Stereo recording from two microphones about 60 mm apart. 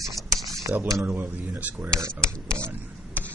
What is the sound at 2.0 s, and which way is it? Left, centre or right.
Speech, right.